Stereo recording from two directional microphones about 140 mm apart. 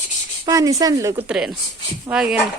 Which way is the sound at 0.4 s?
25° right (ahead or behind).